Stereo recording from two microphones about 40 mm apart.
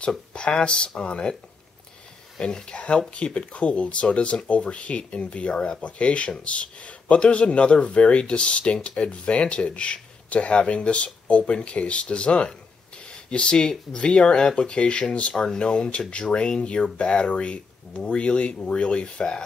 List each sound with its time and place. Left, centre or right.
0.3 s speech: left
2.3 s speech: centre
15.3 s speech: centre
15.6 s speech: left